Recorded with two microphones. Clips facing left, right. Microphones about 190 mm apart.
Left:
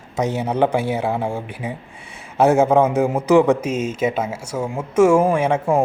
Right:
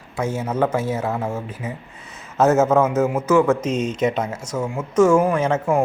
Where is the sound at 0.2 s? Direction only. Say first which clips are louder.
Left 3 dB; 15° left (ahead or behind).